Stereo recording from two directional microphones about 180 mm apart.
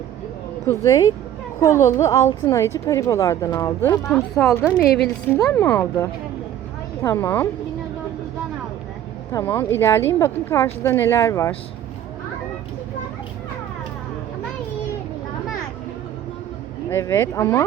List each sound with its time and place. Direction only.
0.6 s speech: 15° left (ahead or behind)
9.3 s speech: 15° left (ahead or behind)
16.9 s speech: 15° left (ahead or behind)